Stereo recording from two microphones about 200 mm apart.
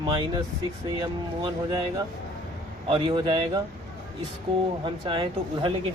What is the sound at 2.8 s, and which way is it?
Speech, 25° right (ahead or behind).